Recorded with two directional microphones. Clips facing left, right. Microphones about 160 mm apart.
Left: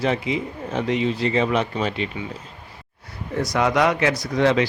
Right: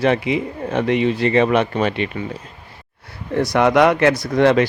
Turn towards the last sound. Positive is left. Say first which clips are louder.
# right 4 dB
turn(degrees=-55)  # may be behind; listen again after turning